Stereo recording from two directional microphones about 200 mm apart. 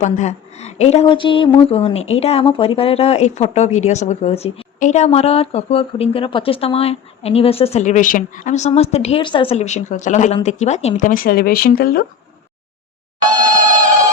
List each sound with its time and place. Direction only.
0.0 s a woman's voice: 35° left (ahead or behind)